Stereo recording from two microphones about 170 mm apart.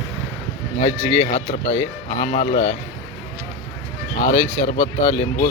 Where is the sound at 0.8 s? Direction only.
40° left (ahead or behind).